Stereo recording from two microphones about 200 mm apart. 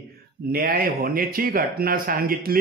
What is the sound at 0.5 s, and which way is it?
Speech, 45° right (ahead or behind).